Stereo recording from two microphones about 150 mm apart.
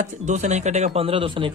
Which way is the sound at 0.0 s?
50° right (ahead or behind).